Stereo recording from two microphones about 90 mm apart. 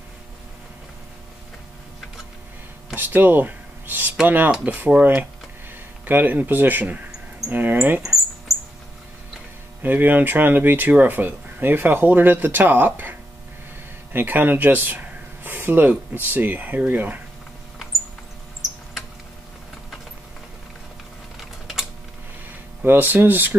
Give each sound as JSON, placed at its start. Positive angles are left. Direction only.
{"t": 3.0, "sound": "speech", "side_deg": -20}
{"t": 8.0, "sound": "a sound", "side_deg": -5}
{"t": 9.8, "sound": "speech", "side_deg": -20}
{"t": 14.1, "sound": "speech", "side_deg": -20}
{"t": 22.8, "sound": "speech", "side_deg": -20}